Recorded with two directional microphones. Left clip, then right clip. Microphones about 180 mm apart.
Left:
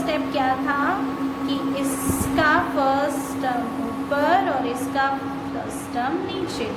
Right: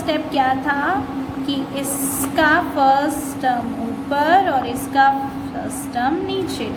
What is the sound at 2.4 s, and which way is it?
Speech, 40° right (ahead or behind).